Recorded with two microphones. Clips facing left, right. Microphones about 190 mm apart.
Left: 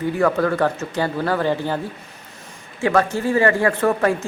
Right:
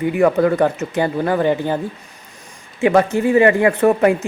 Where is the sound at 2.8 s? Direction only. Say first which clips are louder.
Right 4 dB; 20° right (ahead or behind).